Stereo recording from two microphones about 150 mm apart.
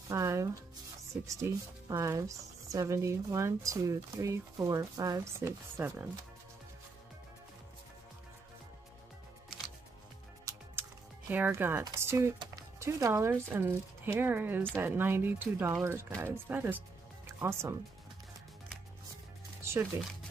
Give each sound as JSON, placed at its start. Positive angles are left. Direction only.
{"t": 0.1, "sound": "speech", "side_deg": -20}
{"t": 10.4, "sound": "music", "side_deg": -15}
{"t": 12.4, "sound": "speech", "side_deg": -25}
{"t": 19.6, "sound": "music", "side_deg": -20}